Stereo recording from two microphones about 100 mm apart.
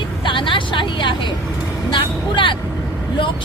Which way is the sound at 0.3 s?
55° left (ahead or behind).